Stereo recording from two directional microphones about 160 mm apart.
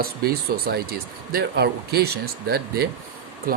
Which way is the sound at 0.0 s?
70° right (ahead or behind).